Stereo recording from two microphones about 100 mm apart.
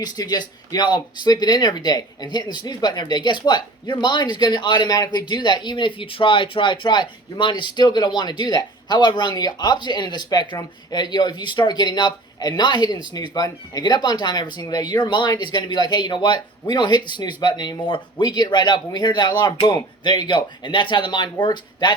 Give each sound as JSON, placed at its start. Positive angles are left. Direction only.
{"t": 0.0, "sound": "speech", "side_deg": 45}